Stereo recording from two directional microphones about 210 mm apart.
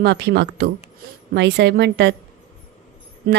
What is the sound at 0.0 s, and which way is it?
Speech, 55° right (ahead or behind).